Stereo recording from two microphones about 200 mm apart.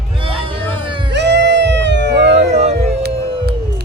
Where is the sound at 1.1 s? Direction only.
60° right (ahead or behind).